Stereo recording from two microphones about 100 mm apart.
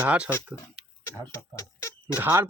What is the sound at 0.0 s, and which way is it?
Speech, 15° right (ahead or behind).